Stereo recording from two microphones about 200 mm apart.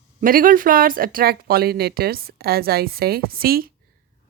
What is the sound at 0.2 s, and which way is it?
Speech, 45° right (ahead or behind).